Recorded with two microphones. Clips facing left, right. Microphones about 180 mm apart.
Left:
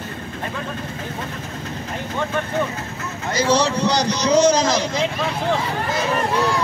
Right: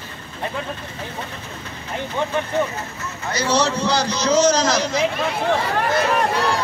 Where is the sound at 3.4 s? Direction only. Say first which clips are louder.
Left 2 dB; 15° left (ahead or behind).